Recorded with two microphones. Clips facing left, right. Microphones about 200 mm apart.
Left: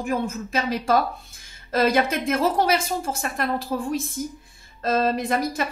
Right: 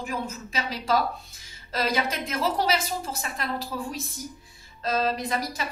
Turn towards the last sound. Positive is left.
turn(degrees=50)  # may be behind; listen again after turning